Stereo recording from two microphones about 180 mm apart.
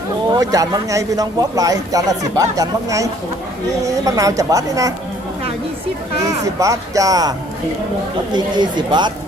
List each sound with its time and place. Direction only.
0.3 s a man's voice: 20° right (ahead or behind)
6.2 s a man's voice: 20° right (ahead or behind)